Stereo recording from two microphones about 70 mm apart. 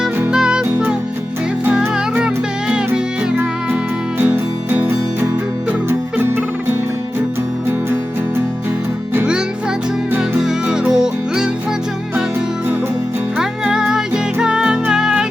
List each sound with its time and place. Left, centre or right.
0.3 s music: centre
2.2 s music: centre
4.2 s music: right
6.1 s fowl: right
10.4 s music: centre
13.4 s music: centre